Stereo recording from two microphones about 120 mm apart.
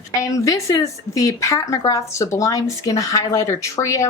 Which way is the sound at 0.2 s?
25° left (ahead or behind).